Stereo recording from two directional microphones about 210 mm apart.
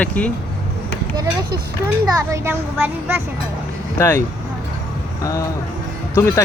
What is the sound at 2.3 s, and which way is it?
Speech, 10° right (ahead or behind).